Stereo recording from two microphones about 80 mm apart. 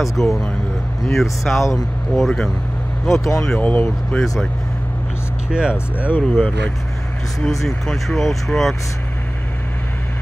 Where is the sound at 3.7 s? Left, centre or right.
Centre.